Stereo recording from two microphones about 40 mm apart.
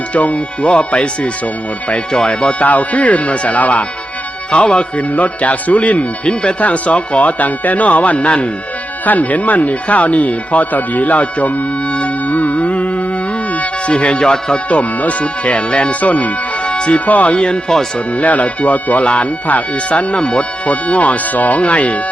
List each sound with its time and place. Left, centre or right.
0.1 s speech: left
2.6 s speech: left
13.5 s music: left
13.9 s speech: left
14.7 s speech: left
17.1 s speech: left
17.3 s speech: left
18.2 s speech: left